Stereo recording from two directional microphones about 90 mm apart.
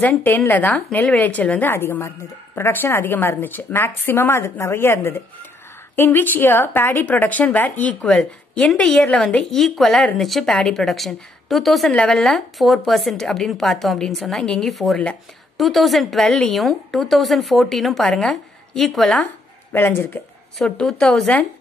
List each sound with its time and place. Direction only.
0.1 s speech: 30° left (ahead or behind)
8.0 s a woman's voice: 5° left (ahead or behind)
19.7 s speech: 25° left (ahead or behind)
20.5 s a woman's voice: 5° left (ahead or behind)